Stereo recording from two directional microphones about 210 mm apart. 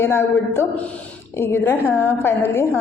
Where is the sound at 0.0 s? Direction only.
10° left (ahead or behind).